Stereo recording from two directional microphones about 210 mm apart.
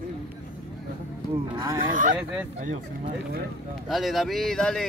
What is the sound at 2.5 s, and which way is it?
Speech, 35° right (ahead or behind).